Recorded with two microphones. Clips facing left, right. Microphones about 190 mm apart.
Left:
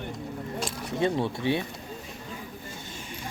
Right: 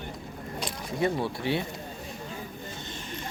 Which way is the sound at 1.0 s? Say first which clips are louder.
Left 2 dB; 20° left (ahead or behind).